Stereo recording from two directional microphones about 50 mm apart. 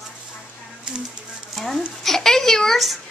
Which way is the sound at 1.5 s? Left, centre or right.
Centre.